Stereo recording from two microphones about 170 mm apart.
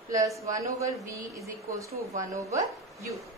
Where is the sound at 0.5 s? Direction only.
20° right (ahead or behind).